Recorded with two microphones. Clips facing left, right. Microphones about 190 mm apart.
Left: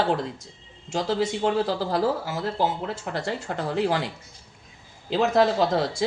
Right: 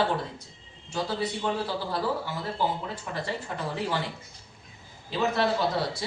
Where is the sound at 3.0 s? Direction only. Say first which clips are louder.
Left 4 dB; 75° left (ahead or behind).